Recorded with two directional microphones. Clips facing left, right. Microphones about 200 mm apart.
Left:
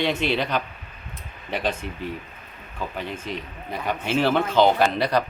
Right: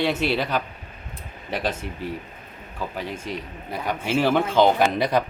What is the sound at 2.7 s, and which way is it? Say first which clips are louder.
Speech: even; 10° right (ahead or behind).